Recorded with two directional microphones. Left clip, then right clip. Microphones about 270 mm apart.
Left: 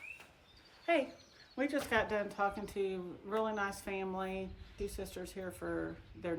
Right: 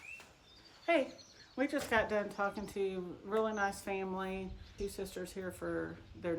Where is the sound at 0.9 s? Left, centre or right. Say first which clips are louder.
Right 1 dB; centre.